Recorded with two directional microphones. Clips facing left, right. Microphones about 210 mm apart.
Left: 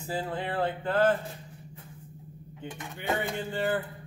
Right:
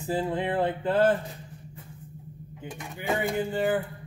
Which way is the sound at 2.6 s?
10° right (ahead or behind).